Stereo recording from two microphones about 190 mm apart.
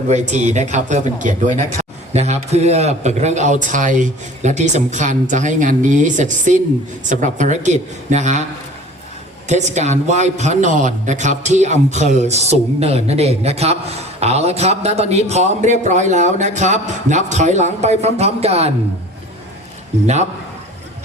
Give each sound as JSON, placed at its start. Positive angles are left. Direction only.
{"t": 0.1, "sound": "speech", "side_deg": -35}
{"t": 9.5, "sound": "speech", "side_deg": -35}